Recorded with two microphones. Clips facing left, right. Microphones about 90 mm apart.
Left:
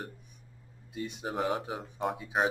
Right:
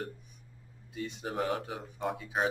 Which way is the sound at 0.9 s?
20° left (ahead or behind).